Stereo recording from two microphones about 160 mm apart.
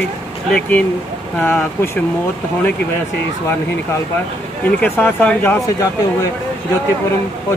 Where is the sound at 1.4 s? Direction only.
10° left (ahead or behind).